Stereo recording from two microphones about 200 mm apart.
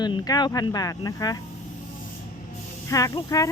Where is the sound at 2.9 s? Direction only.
15° left (ahead or behind).